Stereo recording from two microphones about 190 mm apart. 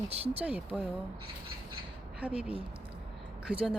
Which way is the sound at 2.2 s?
5° right (ahead or behind).